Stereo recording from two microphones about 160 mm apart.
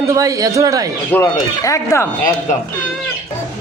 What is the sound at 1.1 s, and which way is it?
Speech, 20° left (ahead or behind).